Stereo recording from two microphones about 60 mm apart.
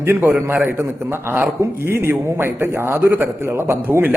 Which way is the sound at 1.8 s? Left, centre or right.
Right.